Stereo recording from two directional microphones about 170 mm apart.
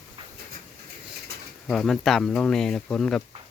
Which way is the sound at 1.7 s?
Centre (ahead or behind).